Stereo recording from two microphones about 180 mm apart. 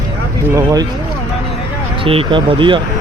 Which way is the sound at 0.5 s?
20° right (ahead or behind).